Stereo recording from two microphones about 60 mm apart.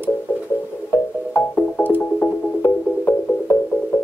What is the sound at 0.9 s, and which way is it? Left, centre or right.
Music, left.